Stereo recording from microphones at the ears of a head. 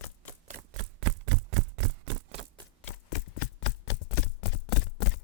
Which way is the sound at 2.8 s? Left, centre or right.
Left.